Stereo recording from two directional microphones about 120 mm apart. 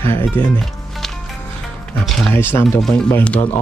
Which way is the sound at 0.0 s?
20° left (ahead or behind).